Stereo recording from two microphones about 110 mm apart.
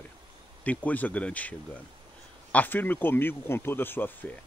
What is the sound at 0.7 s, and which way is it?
Speech, 15° left (ahead or behind).